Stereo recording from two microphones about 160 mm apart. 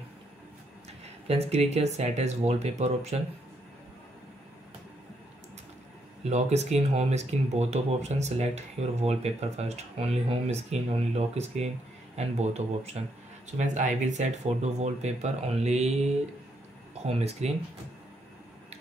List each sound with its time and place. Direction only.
1.0 s speech: 40° right (ahead or behind)
6.2 s speech: 45° right (ahead or behind)